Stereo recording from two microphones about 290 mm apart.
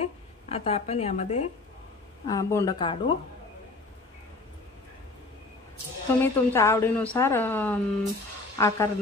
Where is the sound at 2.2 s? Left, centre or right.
Centre.